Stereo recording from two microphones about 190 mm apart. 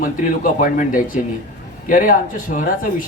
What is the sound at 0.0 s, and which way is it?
Speech, 45° left (ahead or behind).